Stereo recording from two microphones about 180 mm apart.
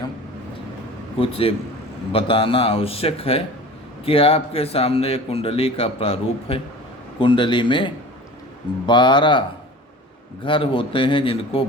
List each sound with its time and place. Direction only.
1.2 s a man's voice: 30° left (ahead or behind)
10.4 s a man's voice: 30° left (ahead or behind)